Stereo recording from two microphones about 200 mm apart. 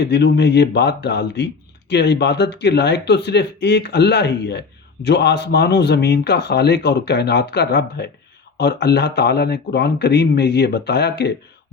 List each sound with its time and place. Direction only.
0.0 s a man's voice: 60° left (ahead or behind)